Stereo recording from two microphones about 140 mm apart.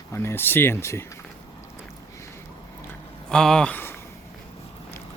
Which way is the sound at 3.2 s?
5° left (ahead or behind).